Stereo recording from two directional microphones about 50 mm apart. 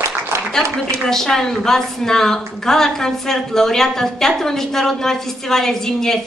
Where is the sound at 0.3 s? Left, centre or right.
Right.